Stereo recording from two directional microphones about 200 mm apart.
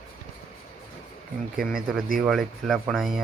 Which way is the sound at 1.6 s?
Centre (ahead or behind).